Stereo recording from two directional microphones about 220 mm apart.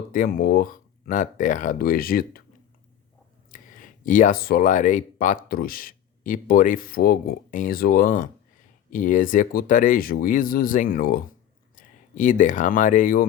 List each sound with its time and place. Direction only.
0.1 s speech: 40° left (ahead or behind)
3.5 s speech: 35° left (ahead or behind)